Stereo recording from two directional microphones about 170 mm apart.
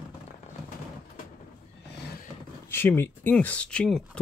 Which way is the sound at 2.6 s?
15° left (ahead or behind).